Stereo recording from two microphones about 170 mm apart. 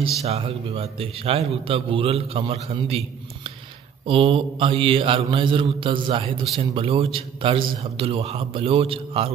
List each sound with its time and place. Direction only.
0.2 s a man's voice: 35° right (ahead or behind)
4.0 s a man's voice: 30° right (ahead or behind)